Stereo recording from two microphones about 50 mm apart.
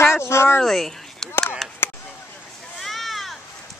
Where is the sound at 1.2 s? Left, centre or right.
Left.